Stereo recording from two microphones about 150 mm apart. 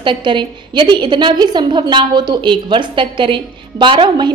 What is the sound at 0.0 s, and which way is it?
A woman's voice, 30° right (ahead or behind).